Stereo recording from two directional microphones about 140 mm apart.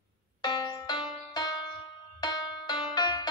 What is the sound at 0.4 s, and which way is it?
Music, 30° left (ahead or behind).